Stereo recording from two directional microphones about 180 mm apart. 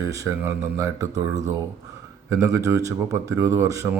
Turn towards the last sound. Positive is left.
turn(degrees=-15)  # may be behind; listen again after turning